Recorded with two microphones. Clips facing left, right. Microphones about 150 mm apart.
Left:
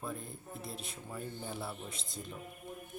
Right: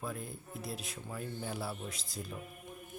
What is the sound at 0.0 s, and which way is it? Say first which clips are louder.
Speech: right 1 dB; 5° right (ahead or behind).